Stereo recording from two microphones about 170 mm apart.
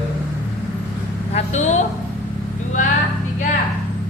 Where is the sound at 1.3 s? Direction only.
40° left (ahead or behind).